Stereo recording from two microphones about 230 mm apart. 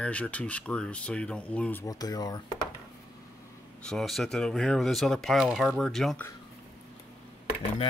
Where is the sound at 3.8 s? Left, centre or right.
Centre.